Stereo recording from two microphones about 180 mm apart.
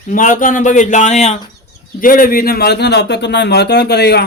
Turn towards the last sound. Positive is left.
turn(degrees=65)  # may be behind; listen again after turning